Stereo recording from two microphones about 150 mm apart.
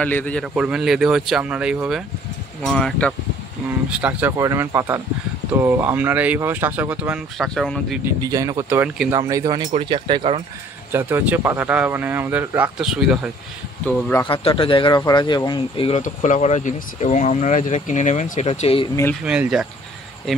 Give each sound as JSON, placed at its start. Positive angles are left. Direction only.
{"t": 0.0, "sound": "a man's voice", "side_deg": 10}
{"t": 0.6, "sound": "speech", "side_deg": -5}
{"t": 3.9, "sound": "speech", "side_deg": -10}
{"t": 7.3, "sound": "speech", "side_deg": 5}
{"t": 8.2, "sound": "speech", "side_deg": -25}
{"t": 9.1, "sound": "speech", "side_deg": -20}
{"t": 9.8, "sound": "speech", "side_deg": -35}
{"t": 10.9, "sound": "speech", "side_deg": -15}
{"t": 14.2, "sound": "speech", "side_deg": 35}
{"t": 16.0, "sound": "speech", "side_deg": 55}
{"t": 18.5, "sound": "speech", "side_deg": 40}
{"t": 19.2, "sound": "speech", "side_deg": -5}